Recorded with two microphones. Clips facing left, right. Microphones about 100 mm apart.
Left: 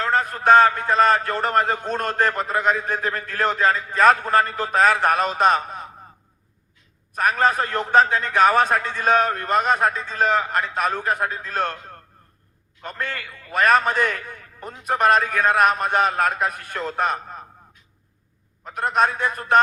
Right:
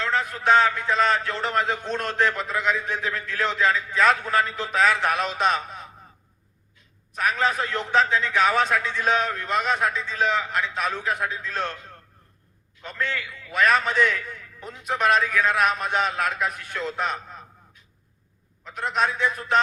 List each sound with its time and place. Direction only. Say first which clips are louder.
0.0 s a man's voice: left 4 dB; 50° left (ahead or behind)
7.1 s a man's voice: left 4 dB; 50° left (ahead or behind)
18.6 s a man's voice: left 4 dB; 50° left (ahead or behind)